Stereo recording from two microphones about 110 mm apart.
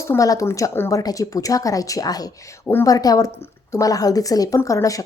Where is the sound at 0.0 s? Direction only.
30° left (ahead or behind).